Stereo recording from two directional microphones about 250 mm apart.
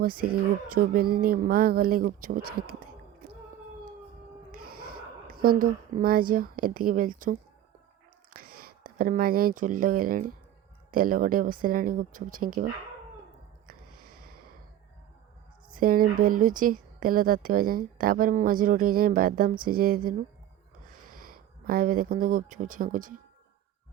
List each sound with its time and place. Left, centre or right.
0.0 s speech: right
4.5 s speech: right
14.0 s snort: right
15.7 s speech: right